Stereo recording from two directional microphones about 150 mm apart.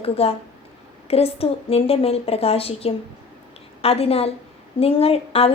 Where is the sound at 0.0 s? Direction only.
40° left (ahead or behind).